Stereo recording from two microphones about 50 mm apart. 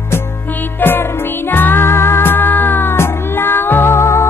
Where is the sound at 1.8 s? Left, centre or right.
Left.